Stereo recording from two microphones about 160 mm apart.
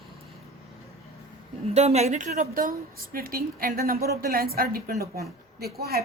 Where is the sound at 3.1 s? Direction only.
65° right (ahead or behind).